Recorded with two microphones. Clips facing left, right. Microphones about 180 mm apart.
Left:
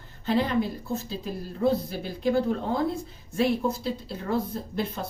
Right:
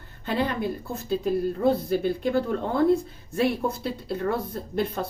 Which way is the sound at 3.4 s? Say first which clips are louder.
Even; 55° right (ahead or behind).